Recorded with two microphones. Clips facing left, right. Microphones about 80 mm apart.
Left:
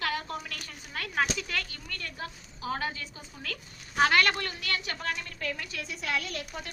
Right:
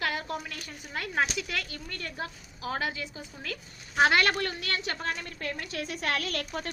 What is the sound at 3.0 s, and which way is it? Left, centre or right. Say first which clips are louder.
A woman's voice: right 3 dB; right.